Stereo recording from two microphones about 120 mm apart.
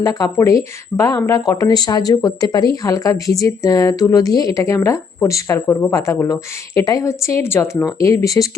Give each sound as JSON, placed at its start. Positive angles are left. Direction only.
{"t": 0.0, "sound": "speech", "side_deg": 30}